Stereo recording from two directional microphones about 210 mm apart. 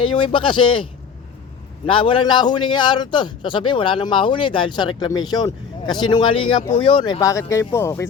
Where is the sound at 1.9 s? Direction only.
25° left (ahead or behind).